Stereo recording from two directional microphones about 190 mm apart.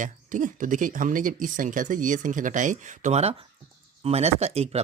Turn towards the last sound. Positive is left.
turn(degrees=-35)  # may be behind; listen again after turning